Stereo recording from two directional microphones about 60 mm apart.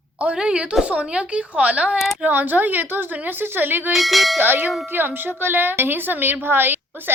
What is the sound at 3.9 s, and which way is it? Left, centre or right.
Speech, centre.